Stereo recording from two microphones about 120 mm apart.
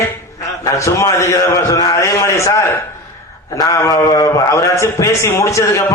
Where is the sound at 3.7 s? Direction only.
25° left (ahead or behind).